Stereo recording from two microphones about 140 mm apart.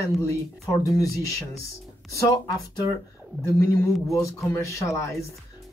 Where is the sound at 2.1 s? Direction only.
25° left (ahead or behind).